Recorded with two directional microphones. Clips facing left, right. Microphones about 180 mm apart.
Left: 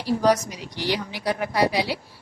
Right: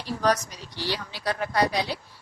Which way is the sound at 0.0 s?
10° left (ahead or behind).